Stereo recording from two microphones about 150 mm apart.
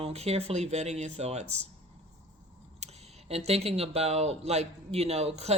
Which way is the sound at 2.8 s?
45° right (ahead or behind).